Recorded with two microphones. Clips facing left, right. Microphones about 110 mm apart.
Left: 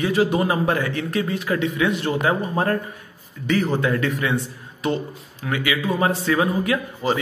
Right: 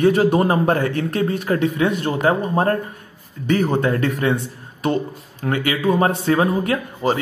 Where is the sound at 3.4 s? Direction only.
50° right (ahead or behind).